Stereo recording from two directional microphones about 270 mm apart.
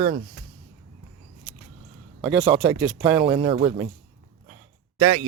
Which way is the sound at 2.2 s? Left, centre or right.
Centre.